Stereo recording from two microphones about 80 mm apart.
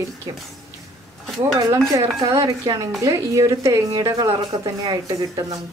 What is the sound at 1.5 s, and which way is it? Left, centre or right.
A woman's voice, right.